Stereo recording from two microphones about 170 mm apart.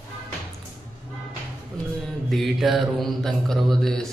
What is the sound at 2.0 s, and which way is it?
Mantra, centre (ahead or behind).